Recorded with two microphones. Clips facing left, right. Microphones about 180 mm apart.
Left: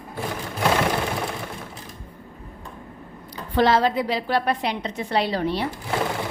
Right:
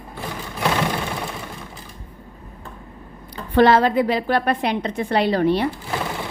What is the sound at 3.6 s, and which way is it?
A woman's voice, 55° right (ahead or behind).